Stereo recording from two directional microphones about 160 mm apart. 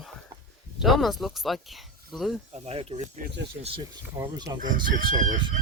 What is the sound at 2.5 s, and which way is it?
Speech, 40° right (ahead or behind).